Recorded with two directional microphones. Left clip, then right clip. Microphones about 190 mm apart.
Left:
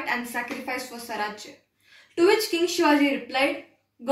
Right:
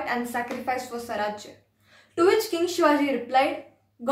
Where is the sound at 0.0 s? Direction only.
15° right (ahead or behind).